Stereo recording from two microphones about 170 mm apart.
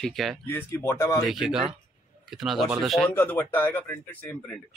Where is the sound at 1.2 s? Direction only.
Centre (ahead or behind).